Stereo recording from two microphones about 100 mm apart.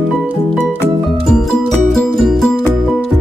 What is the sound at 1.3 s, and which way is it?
Music, centre (ahead or behind).